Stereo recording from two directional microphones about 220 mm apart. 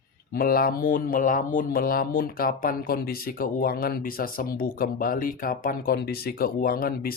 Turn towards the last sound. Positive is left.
turn(degrees=40)  # may be behind; listen again after turning